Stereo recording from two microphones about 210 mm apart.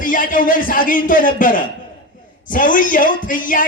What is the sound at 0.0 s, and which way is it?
A man's voice, 40° left (ahead or behind).